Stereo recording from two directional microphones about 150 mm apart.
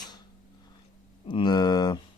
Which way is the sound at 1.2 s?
30° left (ahead or behind).